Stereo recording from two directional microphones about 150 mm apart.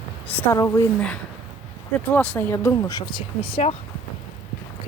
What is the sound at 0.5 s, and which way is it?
Speech, 20° left (ahead or behind).